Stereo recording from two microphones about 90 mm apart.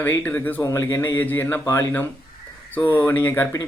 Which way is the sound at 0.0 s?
20° left (ahead or behind).